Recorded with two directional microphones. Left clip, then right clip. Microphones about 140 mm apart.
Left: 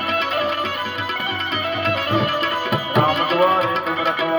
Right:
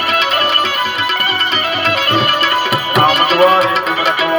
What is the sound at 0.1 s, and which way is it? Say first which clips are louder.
Music: right 7 dB; 45° left (ahead or behind).